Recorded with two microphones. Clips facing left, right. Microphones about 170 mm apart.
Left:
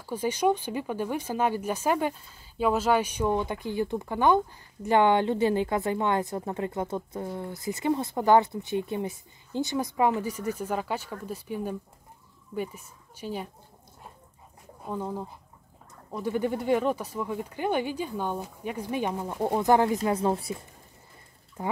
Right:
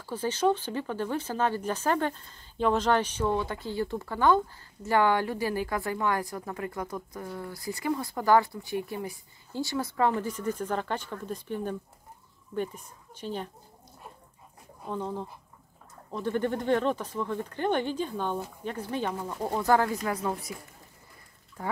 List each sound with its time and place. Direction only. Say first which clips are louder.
0.0 s speech: left 1 dB; 10° left (ahead or behind)
14.9 s speech: left 1 dB; 10° left (ahead or behind); by 20.5 s 30° left (ahead or behind)
21.6 s speech: left 2 dB; 20° left (ahead or behind)